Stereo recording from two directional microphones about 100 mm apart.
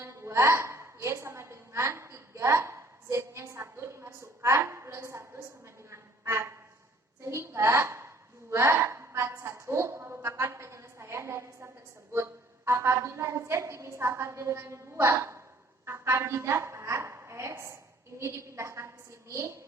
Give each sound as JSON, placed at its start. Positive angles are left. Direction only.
{"t": 0.0, "sound": "a woman's voice", "side_deg": -25}
{"t": 5.9, "sound": "a sound", "side_deg": -25}
{"t": 7.3, "sound": "a woman's voice", "side_deg": -25}